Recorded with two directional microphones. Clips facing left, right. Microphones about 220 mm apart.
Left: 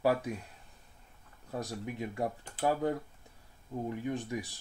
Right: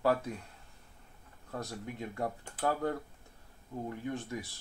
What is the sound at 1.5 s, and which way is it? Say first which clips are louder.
Speech: left 3 dB; 15° left (ahead or behind).